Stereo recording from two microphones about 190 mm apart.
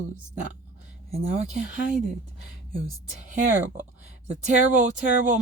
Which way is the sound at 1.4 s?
40° right (ahead or behind).